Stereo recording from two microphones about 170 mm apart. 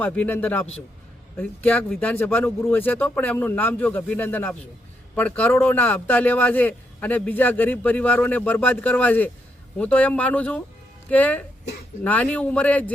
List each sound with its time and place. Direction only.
0.0 s a man's voice: 10° left (ahead or behind)